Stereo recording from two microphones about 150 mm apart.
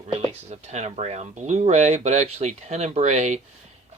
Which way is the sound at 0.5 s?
45° right (ahead or behind).